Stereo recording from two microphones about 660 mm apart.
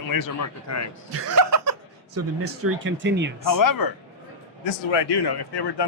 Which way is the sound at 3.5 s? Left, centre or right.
Left.